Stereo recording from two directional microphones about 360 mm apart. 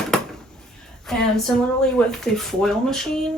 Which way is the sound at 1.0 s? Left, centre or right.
Centre.